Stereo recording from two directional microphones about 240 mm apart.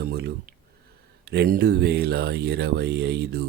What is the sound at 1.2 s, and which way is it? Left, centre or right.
Speech, right.